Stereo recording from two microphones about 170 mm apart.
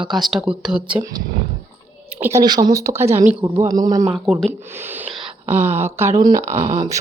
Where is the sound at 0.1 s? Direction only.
Centre (ahead or behind).